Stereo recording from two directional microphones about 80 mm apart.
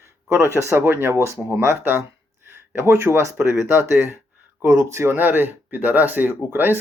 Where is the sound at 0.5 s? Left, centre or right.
Right.